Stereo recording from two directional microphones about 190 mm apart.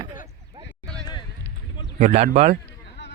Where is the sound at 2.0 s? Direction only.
35° right (ahead or behind).